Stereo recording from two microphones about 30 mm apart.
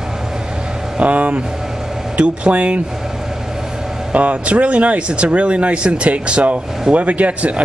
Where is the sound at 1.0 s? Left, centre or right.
Right.